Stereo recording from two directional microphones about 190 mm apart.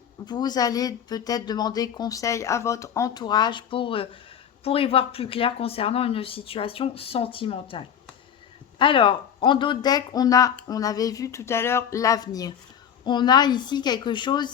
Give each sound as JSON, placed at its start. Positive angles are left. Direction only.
{"t": 0.3, "sound": "speech", "side_deg": 20}